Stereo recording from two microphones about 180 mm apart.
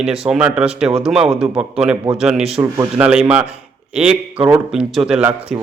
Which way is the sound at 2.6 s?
15° right (ahead or behind).